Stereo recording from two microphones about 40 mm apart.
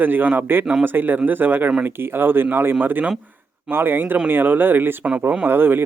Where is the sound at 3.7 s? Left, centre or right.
Right.